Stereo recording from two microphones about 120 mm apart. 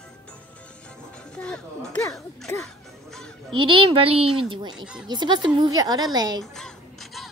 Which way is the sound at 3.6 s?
45° right (ahead or behind).